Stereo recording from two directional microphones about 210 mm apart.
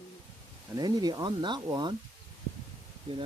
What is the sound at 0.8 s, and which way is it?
Speech, 20° right (ahead or behind).